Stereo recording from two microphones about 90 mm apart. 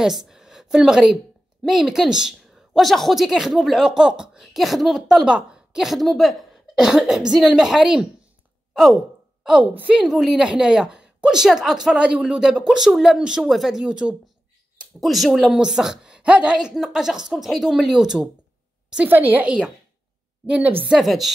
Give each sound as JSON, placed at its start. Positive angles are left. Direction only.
{"t": 0.0, "sound": "a woman's voice", "side_deg": -5}
{"t": 8.7, "sound": "sigh", "side_deg": 0}
{"t": 9.8, "sound": "a woman's voice", "side_deg": -15}
{"t": 10.0, "sound": "a woman's voice", "side_deg": -5}
{"t": 19.0, "sound": "a woman's voice", "side_deg": -20}
{"t": 20.9, "sound": "a woman's voice", "side_deg": 0}